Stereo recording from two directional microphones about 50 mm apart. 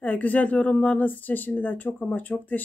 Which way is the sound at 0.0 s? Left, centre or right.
Left.